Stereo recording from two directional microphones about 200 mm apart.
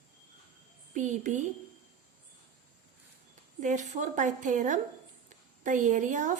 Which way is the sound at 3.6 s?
40° right (ahead or behind).